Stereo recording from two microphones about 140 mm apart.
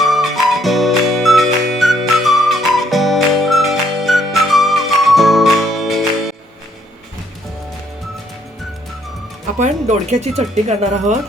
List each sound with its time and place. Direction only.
0.0 s music: centre (ahead or behind)
9.6 s speech: 55° right (ahead or behind)